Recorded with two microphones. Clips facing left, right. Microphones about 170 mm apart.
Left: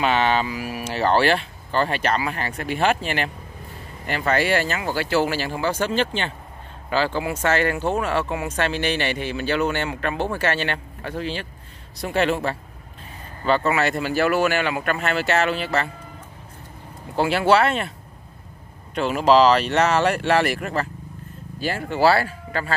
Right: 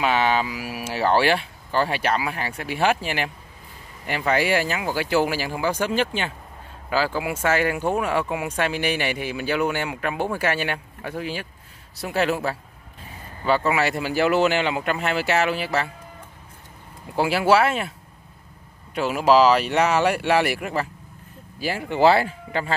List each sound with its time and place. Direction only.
0.0 s speech: 5° right (ahead or behind)
17.2 s speech: 10° right (ahead or behind)
18.9 s speech: 10° right (ahead or behind)